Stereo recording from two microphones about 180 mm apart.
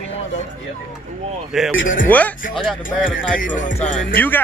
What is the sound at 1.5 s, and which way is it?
Speech, centre (ahead or behind).